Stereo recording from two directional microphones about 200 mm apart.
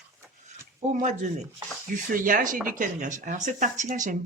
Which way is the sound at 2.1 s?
40° right (ahead or behind).